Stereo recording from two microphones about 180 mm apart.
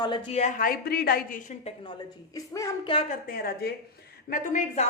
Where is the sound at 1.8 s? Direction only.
25° left (ahead or behind).